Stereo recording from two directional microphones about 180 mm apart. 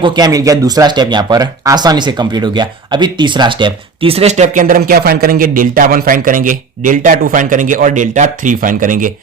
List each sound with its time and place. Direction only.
0.0 s speech: 25° right (ahead or behind); by 9.1 s 50° right (ahead or behind)